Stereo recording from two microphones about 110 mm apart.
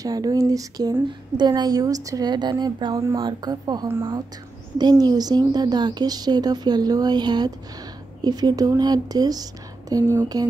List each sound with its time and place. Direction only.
0.0 s a woman's voice: 35° right (ahead or behind)